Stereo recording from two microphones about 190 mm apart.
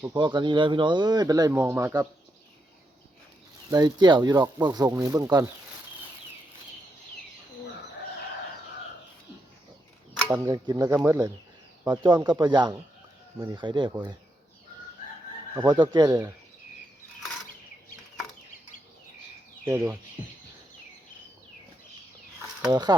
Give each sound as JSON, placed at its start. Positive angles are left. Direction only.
{"t": 0.2, "sound": "speech", "side_deg": -25}
{"t": 3.7, "sound": "speech", "side_deg": -20}
{"t": 10.2, "sound": "speech", "side_deg": -15}
{"t": 15.5, "sound": "speech", "side_deg": -20}
{"t": 19.6, "sound": "speech", "side_deg": -15}
{"t": 22.7, "sound": "speech", "side_deg": -20}